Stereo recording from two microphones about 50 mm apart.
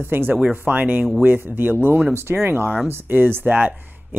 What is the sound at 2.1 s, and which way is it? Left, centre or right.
Speech, right.